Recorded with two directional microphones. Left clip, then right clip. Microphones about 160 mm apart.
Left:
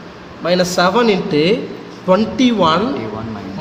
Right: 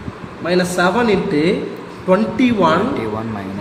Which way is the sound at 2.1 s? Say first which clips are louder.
Left 1 dB; 70° left (ahead or behind).